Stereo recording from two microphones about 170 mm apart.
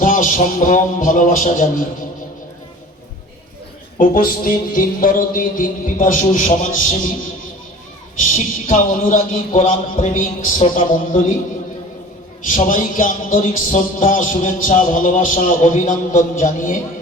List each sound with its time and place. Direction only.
0.0 s music: 50° left (ahead or behind)
3.9 s music: 50° left (ahead or behind)
8.2 s music: 50° left (ahead or behind)
12.5 s music: 50° left (ahead or behind)